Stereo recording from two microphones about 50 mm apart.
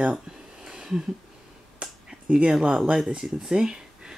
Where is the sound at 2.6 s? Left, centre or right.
Right.